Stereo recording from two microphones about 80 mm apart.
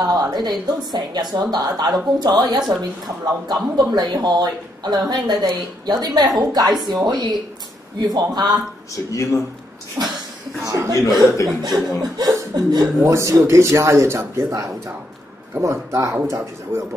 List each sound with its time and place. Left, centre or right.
0.0 s a woman's voice: right
8.9 s speech: left
10.0 s a sound: centre
10.7 s speech: right
11.1 s speech: centre
11.4 s speech: right
13.0 s a man's voice: right
15.5 s a man's voice: right